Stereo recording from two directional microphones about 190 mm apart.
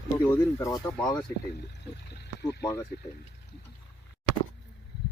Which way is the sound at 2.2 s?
60° left (ahead or behind).